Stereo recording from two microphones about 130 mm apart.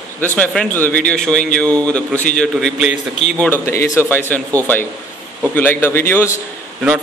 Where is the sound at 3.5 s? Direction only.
20° left (ahead or behind).